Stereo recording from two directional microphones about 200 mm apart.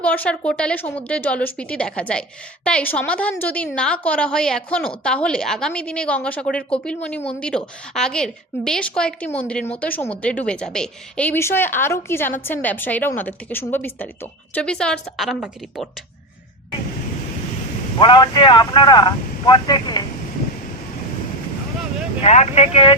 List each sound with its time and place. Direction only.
0.0 s a woman's voice: 5° left (ahead or behind)
18.0 s speech: 20° left (ahead or behind)
22.2 s speech: 35° left (ahead or behind)